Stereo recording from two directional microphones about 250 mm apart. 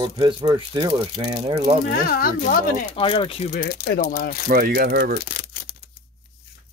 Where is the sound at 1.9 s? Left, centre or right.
Left.